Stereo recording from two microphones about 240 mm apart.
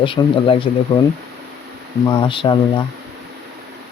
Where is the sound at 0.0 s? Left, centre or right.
Left.